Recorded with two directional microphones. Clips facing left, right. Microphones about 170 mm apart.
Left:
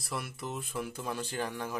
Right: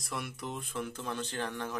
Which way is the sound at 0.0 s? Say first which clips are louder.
Left 1 dB; centre (ahead or behind).